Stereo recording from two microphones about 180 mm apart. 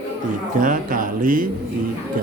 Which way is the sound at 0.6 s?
50° right (ahead or behind).